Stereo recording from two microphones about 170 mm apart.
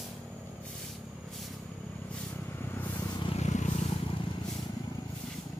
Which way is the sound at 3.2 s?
35° left (ahead or behind).